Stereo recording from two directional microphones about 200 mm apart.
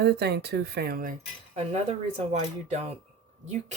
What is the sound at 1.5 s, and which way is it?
Speech, 35° right (ahead or behind).